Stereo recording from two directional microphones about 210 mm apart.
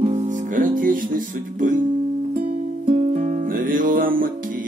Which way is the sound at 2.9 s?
30° right (ahead or behind).